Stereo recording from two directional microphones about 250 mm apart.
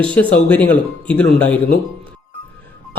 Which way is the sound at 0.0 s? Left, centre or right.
Centre.